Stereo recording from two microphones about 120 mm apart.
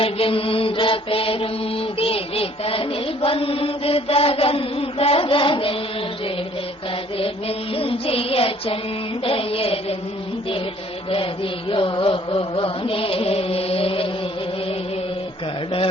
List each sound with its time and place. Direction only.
0.0 s music: 50° left (ahead or behind)
2.0 s mantra: 50° left (ahead or behind)
7.2 s music: 50° left (ahead or behind)
11.7 s music: 45° left (ahead or behind)